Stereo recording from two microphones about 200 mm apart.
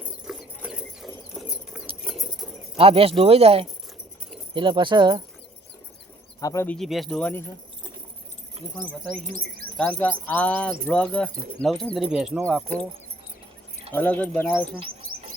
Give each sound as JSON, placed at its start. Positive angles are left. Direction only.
{"t": 0.0, "sound": "a sound", "side_deg": -5}
{"t": 2.0, "sound": "rodents", "side_deg": 0}
{"t": 2.7, "sound": "speech", "side_deg": -30}
{"t": 6.4, "sound": "speech", "side_deg": 15}
{"t": 6.7, "sound": "speech", "side_deg": 0}
{"t": 9.2, "sound": "speech", "side_deg": -45}
{"t": 9.7, "sound": "speech", "side_deg": 5}
{"t": 13.9, "sound": "speech", "side_deg": 10}